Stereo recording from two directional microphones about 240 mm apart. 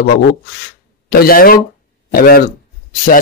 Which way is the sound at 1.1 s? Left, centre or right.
Left.